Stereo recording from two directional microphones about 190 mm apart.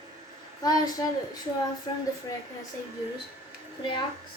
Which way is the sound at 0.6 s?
20° left (ahead or behind).